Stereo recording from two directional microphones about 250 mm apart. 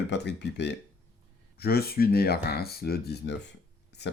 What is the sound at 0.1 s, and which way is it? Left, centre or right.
Speech, left.